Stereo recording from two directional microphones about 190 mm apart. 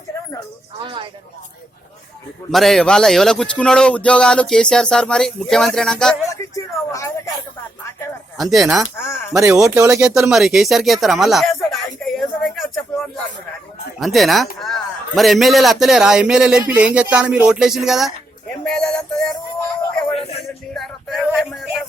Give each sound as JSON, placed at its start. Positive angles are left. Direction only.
{"t": 0.8, "sound": "speech", "side_deg": -25}
{"t": 2.5, "sound": "a man's voice", "side_deg": 0}
{"t": 6.2, "sound": "speech", "side_deg": 15}
{"t": 8.4, "sound": "a man's voice", "side_deg": 0}
{"t": 9.6, "sound": "speech", "side_deg": -15}
{"t": 10.2, "sound": "a sound", "side_deg": 0}
{"t": 14.0, "sound": "a man's voice", "side_deg": 0}
{"t": 18.6, "sound": "music", "side_deg": 5}
{"t": 20.1, "sound": "music", "side_deg": 30}
{"t": 20.7, "sound": "music", "side_deg": 0}